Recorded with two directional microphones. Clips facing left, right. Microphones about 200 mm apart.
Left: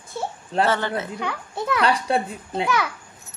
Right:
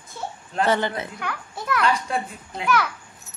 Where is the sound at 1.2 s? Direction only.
20° left (ahead or behind).